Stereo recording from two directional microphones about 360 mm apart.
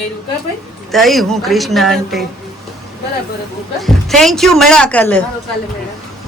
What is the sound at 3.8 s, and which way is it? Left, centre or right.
A man's voice, centre.